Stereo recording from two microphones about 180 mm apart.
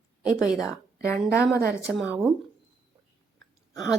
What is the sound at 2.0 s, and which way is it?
Speech, centre (ahead or behind).